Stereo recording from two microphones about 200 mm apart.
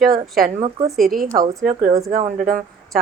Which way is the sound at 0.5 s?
30° right (ahead or behind).